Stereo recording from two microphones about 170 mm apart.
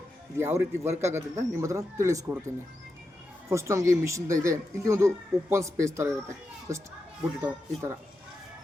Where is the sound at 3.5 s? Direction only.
15° right (ahead or behind).